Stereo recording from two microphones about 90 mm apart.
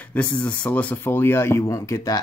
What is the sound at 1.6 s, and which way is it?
Speech, 40° left (ahead or behind).